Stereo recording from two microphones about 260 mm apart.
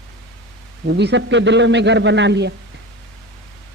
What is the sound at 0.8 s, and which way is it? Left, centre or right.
A man's voice, right.